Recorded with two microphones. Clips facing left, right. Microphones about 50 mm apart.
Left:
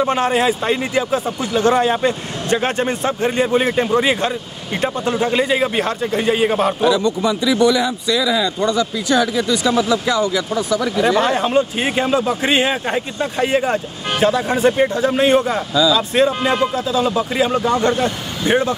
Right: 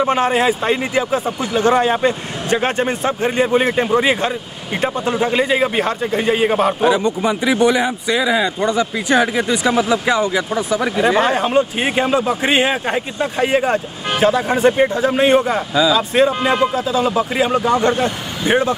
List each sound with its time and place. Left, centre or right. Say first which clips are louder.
0.0 s speech: right 1 dB; centre
6.8 s speech: even; right
8.5 s speech: even; right
11.2 s speech: right 1 dB; centre